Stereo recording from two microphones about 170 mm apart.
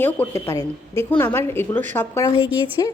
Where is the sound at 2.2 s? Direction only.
30° left (ahead or behind).